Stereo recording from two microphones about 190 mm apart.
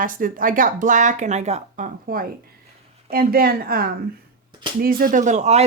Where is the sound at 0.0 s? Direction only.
45° right (ahead or behind).